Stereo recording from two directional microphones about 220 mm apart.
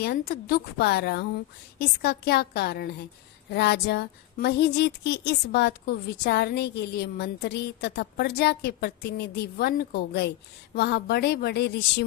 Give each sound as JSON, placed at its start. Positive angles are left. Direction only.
{"t": 0.0, "sound": "a woman's voice", "side_deg": 45}